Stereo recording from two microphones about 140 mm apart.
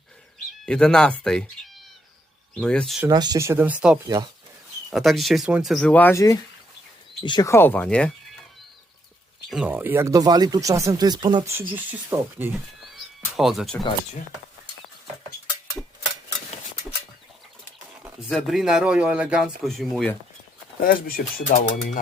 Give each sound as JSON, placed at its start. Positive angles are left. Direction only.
{"t": 0.6, "sound": "speech", "side_deg": 5}
{"t": 2.6, "sound": "speech", "side_deg": 5}
{"t": 3.1, "sound": "speech", "side_deg": -30}
{"t": 5.7, "sound": "speech", "side_deg": 10}
{"t": 7.5, "sound": "speech", "side_deg": 15}
{"t": 9.5, "sound": "speech", "side_deg": -10}
{"t": 11.7, "sound": "speech", "side_deg": -15}
{"t": 12.5, "sound": "a sound", "side_deg": 0}
{"t": 18.3, "sound": "speech", "side_deg": 0}
{"t": 20.8, "sound": "speech", "side_deg": 90}